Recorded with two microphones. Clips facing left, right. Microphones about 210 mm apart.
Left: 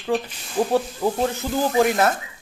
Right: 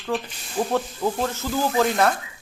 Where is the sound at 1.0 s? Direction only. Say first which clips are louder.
Left 2 dB; 15° left (ahead or behind).